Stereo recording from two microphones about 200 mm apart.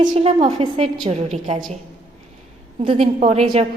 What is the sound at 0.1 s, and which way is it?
A woman's voice, 30° right (ahead or behind).